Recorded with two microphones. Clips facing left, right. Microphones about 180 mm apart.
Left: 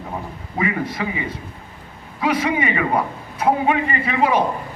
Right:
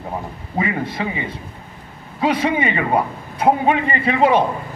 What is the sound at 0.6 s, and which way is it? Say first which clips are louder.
Speech: even; 30° right (ahead or behind).